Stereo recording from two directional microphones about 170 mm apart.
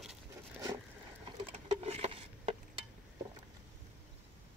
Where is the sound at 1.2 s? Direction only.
35° right (ahead or behind).